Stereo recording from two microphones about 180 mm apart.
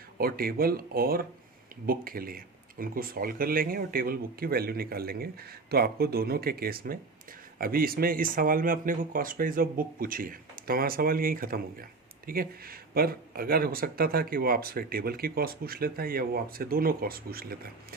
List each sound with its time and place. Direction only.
0.2 s speech: 55° right (ahead or behind)